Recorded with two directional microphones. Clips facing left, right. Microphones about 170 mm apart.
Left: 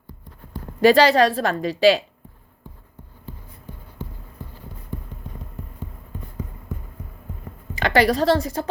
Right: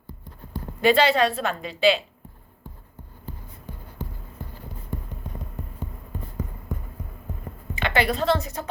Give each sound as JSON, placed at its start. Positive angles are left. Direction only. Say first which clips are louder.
{"t": 0.8, "sound": "a woman's voice", "louder": "left 5 dB", "side_deg": 40}
{"t": 7.8, "sound": "a woman's voice", "louder": "left 5 dB", "side_deg": 40}